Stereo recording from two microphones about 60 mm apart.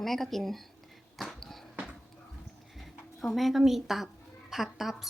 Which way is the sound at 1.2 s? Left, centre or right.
Centre.